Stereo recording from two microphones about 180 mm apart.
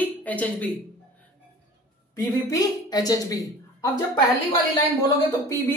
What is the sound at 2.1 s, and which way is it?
A woman's voice, 20° left (ahead or behind).